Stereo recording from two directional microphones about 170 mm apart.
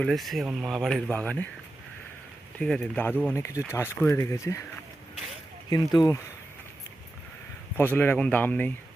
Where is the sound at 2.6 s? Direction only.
5° left (ahead or behind).